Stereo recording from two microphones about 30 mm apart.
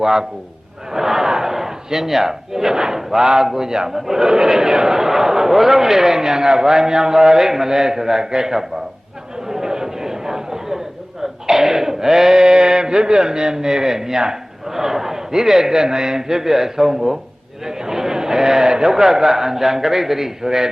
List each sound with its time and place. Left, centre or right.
0.0 s a man's voice: centre
0.9 s a sound: centre
3.0 s a man's voice: centre
3.2 s a man's voice: right
9.5 s a sound: centre
12.4 s a man's voice: right